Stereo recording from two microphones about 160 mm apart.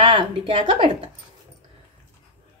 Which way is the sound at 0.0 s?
30° right (ahead or behind).